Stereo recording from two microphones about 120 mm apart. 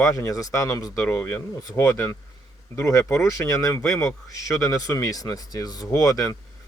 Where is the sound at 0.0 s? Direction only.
25° left (ahead or behind).